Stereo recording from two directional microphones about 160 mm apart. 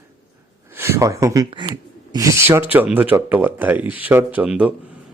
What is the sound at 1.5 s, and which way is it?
Speech, 30° right (ahead or behind).